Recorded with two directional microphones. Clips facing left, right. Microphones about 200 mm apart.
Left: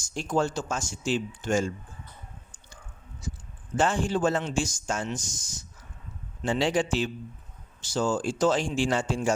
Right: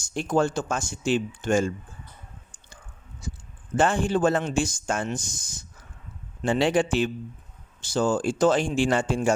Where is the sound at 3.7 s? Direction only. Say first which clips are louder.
Right 3 dB; 55° right (ahead or behind).